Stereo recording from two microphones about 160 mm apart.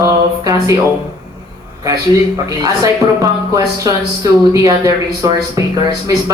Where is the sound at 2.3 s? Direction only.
25° right (ahead or behind).